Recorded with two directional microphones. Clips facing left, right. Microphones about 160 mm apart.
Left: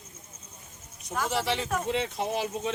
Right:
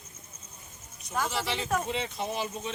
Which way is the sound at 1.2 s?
60° left (ahead or behind).